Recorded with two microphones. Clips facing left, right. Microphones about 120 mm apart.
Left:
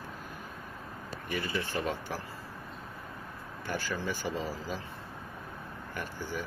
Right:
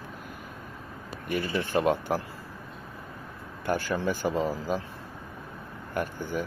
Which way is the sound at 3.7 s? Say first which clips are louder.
Right 7 dB; 55° right (ahead or behind).